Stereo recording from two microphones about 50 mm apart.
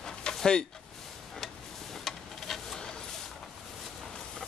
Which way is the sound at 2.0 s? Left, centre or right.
Centre.